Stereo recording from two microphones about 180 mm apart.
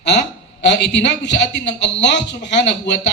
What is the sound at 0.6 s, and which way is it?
A man's voice, 75° left (ahead or behind).